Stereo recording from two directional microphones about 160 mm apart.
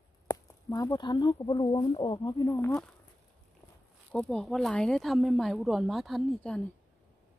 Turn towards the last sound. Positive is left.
turn(degrees=5)  # may be behind; listen again after turning